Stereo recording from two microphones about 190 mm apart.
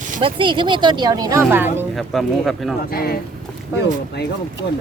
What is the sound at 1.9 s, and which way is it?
Speech, centre (ahead or behind).